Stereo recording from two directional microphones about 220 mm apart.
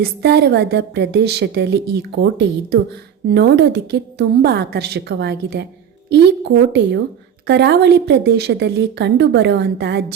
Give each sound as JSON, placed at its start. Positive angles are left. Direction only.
{"t": 0.0, "sound": "a woman's voice", "side_deg": -50}